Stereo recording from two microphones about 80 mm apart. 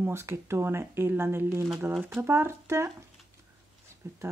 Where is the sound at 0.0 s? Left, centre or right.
Right.